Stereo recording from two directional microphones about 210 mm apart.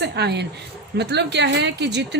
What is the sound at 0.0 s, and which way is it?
A woman's voice, 50° right (ahead or behind).